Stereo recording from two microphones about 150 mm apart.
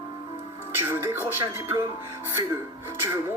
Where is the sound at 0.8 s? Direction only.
15° right (ahead or behind).